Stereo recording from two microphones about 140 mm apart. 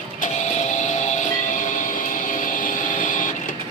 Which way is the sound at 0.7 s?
60° left (ahead or behind).